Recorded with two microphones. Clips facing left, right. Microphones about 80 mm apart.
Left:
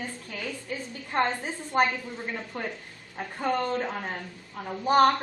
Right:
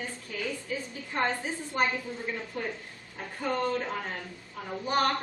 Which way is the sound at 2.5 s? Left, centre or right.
Left.